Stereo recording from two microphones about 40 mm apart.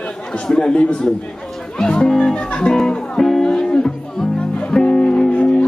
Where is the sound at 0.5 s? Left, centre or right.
Left.